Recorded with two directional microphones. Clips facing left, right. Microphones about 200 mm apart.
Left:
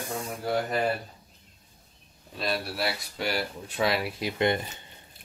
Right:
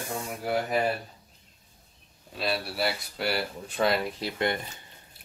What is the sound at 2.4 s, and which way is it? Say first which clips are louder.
Speech: right 1 dB; centre (ahead or behind).